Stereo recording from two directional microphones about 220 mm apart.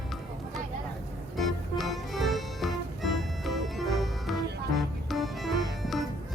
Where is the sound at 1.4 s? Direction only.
Centre (ahead or behind).